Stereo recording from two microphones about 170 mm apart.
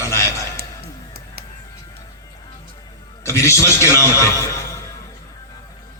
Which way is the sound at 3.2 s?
15° left (ahead or behind).